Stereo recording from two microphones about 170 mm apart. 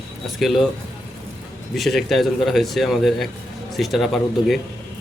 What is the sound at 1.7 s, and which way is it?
A man's voice, centre (ahead or behind).